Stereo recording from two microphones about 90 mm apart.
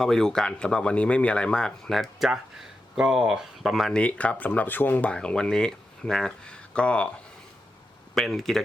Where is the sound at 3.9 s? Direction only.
15° left (ahead or behind).